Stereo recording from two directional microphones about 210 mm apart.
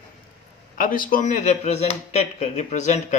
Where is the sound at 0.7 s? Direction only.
40° left (ahead or behind).